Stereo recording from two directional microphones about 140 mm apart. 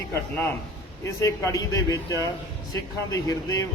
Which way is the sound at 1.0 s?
20° left (ahead or behind).